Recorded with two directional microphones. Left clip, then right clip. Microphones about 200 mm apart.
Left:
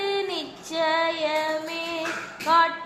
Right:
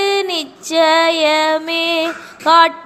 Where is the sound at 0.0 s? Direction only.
35° right (ahead or behind).